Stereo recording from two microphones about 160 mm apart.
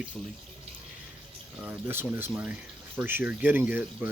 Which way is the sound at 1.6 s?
10° right (ahead or behind).